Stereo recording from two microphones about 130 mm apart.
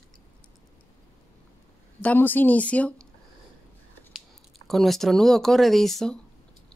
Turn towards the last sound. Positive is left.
turn(degrees=5)  # may be behind; listen again after turning